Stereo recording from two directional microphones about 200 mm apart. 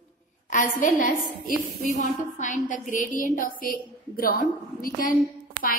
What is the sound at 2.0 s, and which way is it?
A woman's voice, 40° left (ahead or behind).